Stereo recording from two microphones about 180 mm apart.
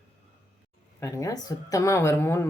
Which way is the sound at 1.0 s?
20° left (ahead or behind).